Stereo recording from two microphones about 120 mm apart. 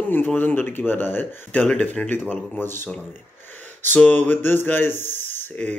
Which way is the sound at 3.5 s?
15° left (ahead or behind).